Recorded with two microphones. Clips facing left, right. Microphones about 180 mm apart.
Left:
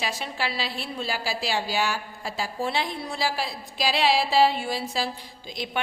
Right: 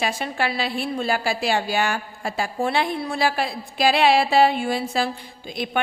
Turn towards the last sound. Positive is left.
turn(degrees=-55)  # may be behind; listen again after turning